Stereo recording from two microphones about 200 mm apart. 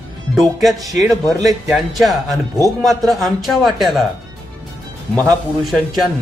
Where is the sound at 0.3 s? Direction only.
Centre (ahead or behind).